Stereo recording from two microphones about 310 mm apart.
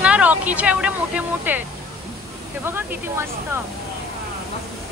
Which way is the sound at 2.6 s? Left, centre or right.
Centre.